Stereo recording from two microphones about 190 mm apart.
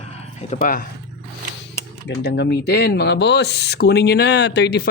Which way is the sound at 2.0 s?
60° left (ahead or behind).